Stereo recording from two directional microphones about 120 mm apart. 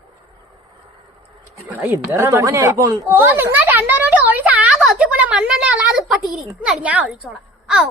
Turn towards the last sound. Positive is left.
turn(degrees=-5)  # may be behind; listen again after turning